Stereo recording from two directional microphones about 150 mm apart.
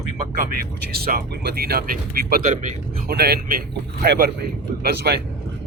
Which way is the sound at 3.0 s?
90° right.